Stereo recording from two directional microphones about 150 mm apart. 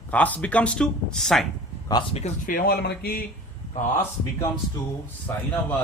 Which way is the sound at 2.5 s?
75° left (ahead or behind).